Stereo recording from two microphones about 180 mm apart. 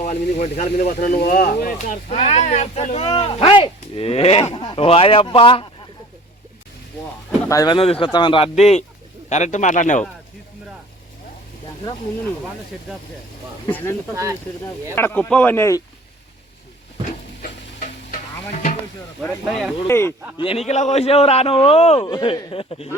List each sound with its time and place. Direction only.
0.0 s speech: 40° left (ahead or behind)
1.2 s speech: 60° left (ahead or behind); by 5.6 s 30° left (ahead or behind)
7.3 s pigeon: 15° left (ahead or behind)
7.8 s speech: 30° left (ahead or behind)
13.7 s speech: 10° left (ahead or behind)
14.9 s speech: 10° left (ahead or behind)
19.5 s speech: centre (ahead or behind)
19.9 s speech: 15° left (ahead or behind)
20.4 s speech: 35° left (ahead or behind)